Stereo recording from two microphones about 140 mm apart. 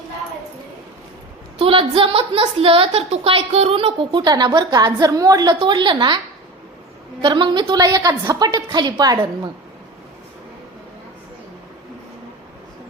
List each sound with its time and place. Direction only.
1.5 s a woman's voice: 40° right (ahead or behind)
7.2 s a woman's voice: 35° right (ahead or behind)